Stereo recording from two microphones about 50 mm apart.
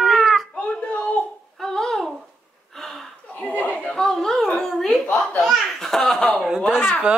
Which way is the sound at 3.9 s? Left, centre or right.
Centre.